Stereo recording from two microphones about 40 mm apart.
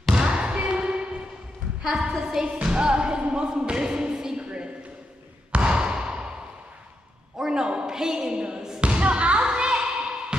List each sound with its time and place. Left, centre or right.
0.1 s basketball bounce: right
0.7 s a sound: right
1.8 s a woman's voice: centre
2.4 s music: right
5.5 s basketball bounce: right
7.3 s a sound: centre
8.9 s thump: right